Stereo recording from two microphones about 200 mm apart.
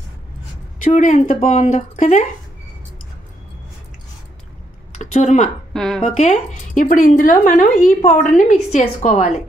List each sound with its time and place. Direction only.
0.9 s a woman's voice: 40° left (ahead or behind)
4.9 s a sound: 35° left (ahead or behind)
5.7 s a woman's voice: centre (ahead or behind)
6.0 s a woman's voice: 35° left (ahead or behind)